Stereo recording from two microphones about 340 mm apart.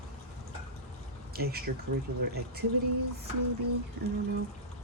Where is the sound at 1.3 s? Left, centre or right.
Right.